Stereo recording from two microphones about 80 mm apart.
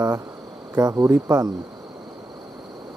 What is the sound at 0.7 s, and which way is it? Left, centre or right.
Speech, right.